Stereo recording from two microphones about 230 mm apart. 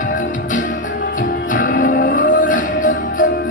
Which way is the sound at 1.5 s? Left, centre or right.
Left.